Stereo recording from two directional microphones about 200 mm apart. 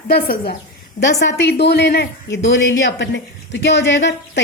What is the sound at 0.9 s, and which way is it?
Speech, 60° left (ahead or behind).